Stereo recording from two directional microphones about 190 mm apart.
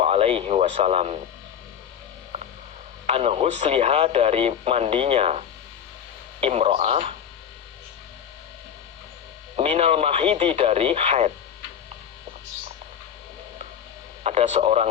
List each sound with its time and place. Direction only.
0.0 s speech: 30° right (ahead or behind)
2.3 s hum: 35° right (ahead or behind)
3.1 s speech: 30° right (ahead or behind)
9.6 s speech: 30° right (ahead or behind)
14.3 s speech: 35° right (ahead or behind)